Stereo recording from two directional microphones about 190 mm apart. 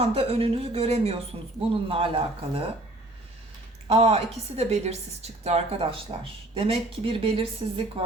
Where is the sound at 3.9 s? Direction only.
30° right (ahead or behind).